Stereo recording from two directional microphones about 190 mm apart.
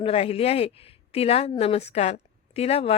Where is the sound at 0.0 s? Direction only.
30° left (ahead or behind).